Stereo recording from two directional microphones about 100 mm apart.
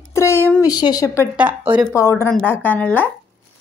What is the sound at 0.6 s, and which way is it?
Speech, 40° left (ahead or behind).